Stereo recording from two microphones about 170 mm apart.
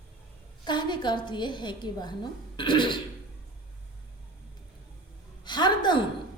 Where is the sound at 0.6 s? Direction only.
25° left (ahead or behind).